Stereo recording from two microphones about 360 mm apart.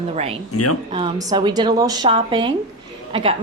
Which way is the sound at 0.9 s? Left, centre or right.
Centre.